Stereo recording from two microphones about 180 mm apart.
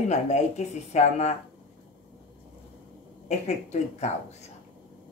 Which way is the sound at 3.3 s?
40° left (ahead or behind).